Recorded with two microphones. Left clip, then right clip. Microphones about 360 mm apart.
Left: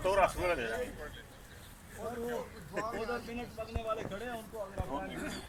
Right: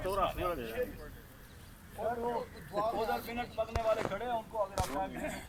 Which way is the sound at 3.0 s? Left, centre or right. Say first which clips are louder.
Right 4 dB; right.